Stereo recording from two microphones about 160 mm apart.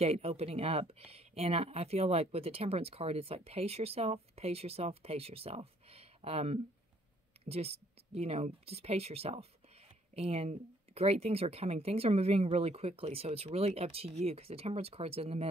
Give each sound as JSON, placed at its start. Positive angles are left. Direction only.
{"t": 0.0, "sound": "speech", "side_deg": -40}